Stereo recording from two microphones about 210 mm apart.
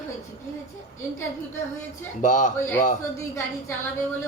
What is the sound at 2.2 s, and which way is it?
Speech, 35° left (ahead or behind).